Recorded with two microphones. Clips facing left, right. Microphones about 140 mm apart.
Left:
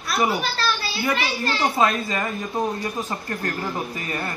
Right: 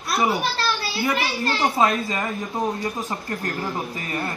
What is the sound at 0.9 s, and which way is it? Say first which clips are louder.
Speech: even; centre (ahead or behind).